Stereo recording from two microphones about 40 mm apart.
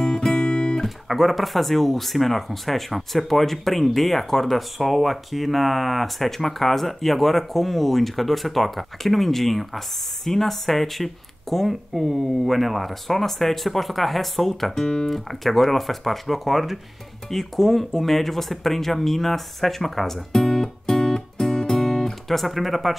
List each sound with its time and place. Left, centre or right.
0.0 s music: centre
0.8 s speech: centre
22.3 s speech: centre